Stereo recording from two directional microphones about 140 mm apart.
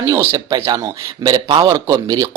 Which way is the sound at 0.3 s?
25° right (ahead or behind).